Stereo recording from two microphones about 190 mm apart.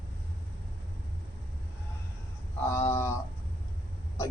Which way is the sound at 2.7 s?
15° left (ahead or behind).